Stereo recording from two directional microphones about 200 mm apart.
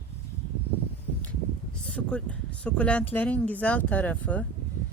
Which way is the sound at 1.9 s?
5° left (ahead or behind).